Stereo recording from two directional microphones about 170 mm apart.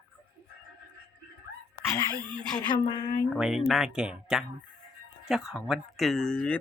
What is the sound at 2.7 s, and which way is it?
Speech, 30° left (ahead or behind).